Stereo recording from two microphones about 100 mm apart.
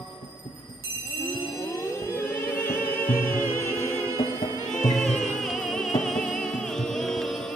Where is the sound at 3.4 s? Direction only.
20° left (ahead or behind).